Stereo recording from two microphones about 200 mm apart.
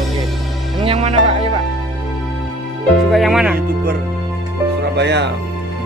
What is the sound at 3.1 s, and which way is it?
Music, centre (ahead or behind).